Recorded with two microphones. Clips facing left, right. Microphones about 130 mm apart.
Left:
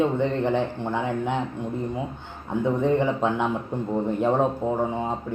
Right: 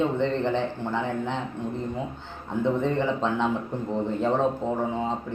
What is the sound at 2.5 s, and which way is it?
A man's voice, 15° left (ahead or behind).